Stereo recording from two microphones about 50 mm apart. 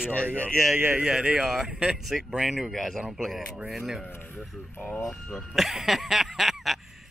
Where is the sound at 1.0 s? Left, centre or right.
Right.